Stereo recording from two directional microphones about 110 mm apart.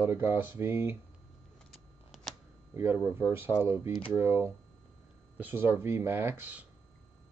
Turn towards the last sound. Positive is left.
turn(degrees=-15)  # may be behind; listen again after turning